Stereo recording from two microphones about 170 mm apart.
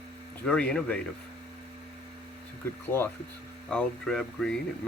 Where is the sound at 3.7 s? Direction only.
5° left (ahead or behind).